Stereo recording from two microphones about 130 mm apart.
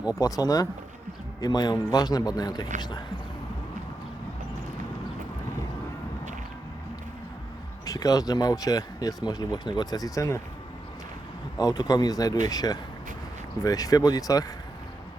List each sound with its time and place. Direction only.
0.1 s a man's voice: 25° left (ahead or behind)
7.9 s speech: 30° left (ahead or behind)
11.5 s speech: 30° left (ahead or behind)